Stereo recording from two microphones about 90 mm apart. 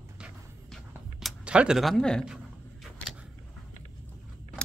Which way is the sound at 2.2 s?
5° right (ahead or behind).